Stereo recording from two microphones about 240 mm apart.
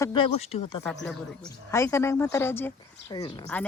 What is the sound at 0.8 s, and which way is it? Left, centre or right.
Speech, centre.